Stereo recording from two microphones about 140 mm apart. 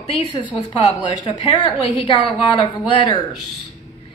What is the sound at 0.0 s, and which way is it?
A woman's voice, 40° left (ahead or behind).